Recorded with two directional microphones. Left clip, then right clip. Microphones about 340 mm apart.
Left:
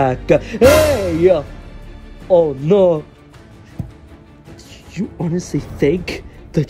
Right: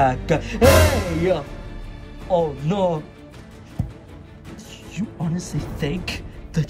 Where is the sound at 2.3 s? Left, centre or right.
Centre.